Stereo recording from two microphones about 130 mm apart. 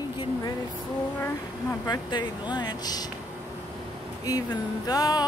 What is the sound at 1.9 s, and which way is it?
Speech, 35° left (ahead or behind).